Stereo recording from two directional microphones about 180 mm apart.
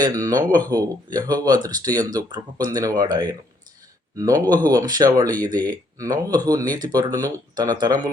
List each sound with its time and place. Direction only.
0.0 s speech: 20° right (ahead or behind)